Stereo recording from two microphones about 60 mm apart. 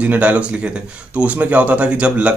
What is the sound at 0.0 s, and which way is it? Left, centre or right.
A man's voice, right.